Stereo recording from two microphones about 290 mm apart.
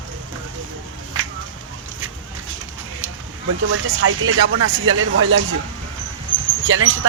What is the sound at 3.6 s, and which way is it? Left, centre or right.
Speech, right.